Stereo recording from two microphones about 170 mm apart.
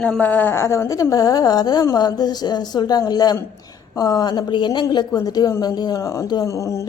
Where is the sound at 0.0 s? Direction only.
10° left (ahead or behind).